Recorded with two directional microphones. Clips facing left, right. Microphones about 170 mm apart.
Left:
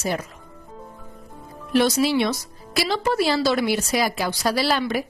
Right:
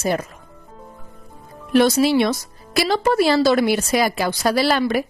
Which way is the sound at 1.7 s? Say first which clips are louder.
Right 4 dB; 55° right (ahead or behind).